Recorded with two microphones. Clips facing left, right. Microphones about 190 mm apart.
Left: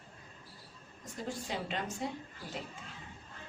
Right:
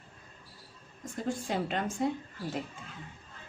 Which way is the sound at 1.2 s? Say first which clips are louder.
Right 6 dB; 50° right (ahead or behind).